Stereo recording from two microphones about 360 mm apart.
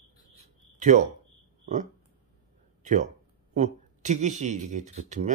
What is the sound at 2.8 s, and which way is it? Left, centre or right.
Speech, centre.